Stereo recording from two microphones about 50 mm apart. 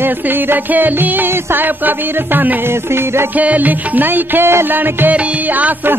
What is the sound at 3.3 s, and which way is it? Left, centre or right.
Music, right.